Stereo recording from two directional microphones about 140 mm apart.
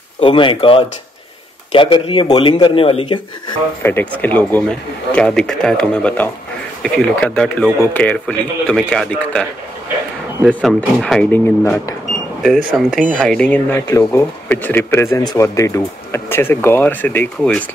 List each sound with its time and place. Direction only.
0.2 s speech: 40° left (ahead or behind)
3.8 s speech: 15° left (ahead or behind)
10.6 s speech: centre (ahead or behind)
11.3 s speech: 15° left (ahead or behind)
12.7 s speech: centre (ahead or behind)